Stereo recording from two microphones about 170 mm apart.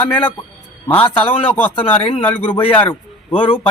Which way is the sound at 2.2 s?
10° left (ahead or behind).